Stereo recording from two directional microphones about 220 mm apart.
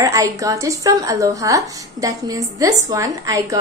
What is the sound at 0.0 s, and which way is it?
Speech, 15° right (ahead or behind).